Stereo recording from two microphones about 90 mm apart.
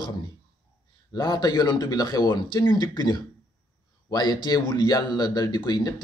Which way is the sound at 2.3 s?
60° left (ahead or behind).